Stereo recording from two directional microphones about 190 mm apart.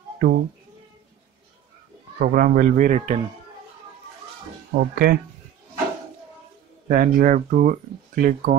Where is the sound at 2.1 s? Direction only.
45° right (ahead or behind).